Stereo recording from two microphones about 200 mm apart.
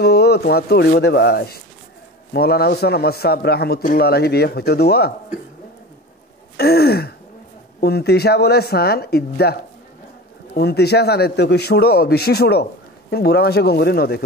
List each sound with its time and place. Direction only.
0.0 s a man's voice: 55° left (ahead or behind)
6.5 s gasp: 50° left (ahead or behind)
7.8 s a man's voice: 55° left (ahead or behind)